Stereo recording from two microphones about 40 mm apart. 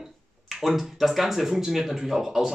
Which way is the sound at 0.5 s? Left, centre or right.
Centre.